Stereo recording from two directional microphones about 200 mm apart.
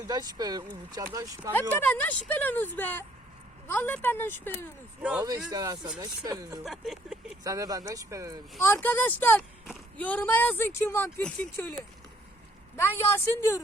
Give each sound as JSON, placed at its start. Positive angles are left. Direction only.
{"t": 0.1, "sound": "speech", "side_deg": -20}
{"t": 1.7, "sound": "speech", "side_deg": 10}
{"t": 5.5, "sound": "speech", "side_deg": -20}
{"t": 6.7, "sound": "a sound", "side_deg": 0}
{"t": 7.4, "sound": "speech", "side_deg": -15}
{"t": 8.6, "sound": "speech", "side_deg": 10}
{"t": 12.7, "sound": "speech", "side_deg": 10}